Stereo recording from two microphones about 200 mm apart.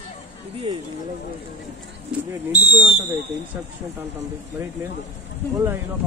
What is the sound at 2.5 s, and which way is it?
Speech, 30° right (ahead or behind).